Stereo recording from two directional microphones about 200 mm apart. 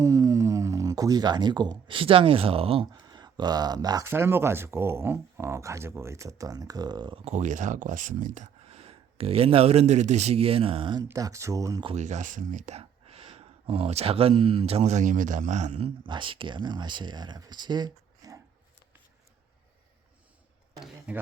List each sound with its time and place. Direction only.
0.0 s speech: 15° right (ahead or behind)
7.3 s speech: 40° right (ahead or behind); by 11.9 s 20° right (ahead or behind)
11.9 s speech: 35° right (ahead or behind)
16.0 s speech: 25° right (ahead or behind)
20.7 s speech: centre (ahead or behind)